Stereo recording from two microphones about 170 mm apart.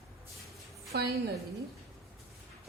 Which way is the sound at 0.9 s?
70° right (ahead or behind).